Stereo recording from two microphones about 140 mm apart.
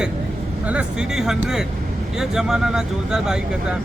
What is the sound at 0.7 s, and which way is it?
Speech, 5° right (ahead or behind).